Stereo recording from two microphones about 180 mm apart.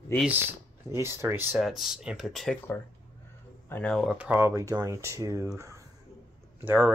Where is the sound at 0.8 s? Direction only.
15° right (ahead or behind).